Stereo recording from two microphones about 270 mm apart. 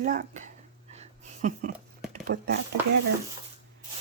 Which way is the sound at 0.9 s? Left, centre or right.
Right.